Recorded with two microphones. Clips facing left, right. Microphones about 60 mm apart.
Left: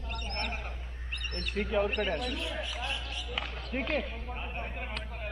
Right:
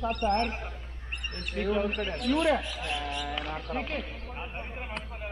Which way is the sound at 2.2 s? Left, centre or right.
Right.